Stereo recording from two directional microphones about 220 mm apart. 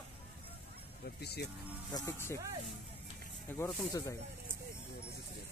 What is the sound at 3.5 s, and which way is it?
Speech, 15° left (ahead or behind).